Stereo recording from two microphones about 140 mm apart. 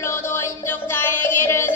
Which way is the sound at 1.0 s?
15° left (ahead or behind).